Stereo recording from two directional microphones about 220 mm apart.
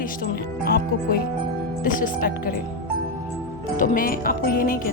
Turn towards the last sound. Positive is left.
turn(degrees=40)  # may be behind; listen again after turning